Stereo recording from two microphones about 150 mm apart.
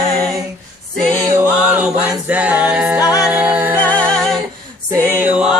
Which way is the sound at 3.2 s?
10° right (ahead or behind).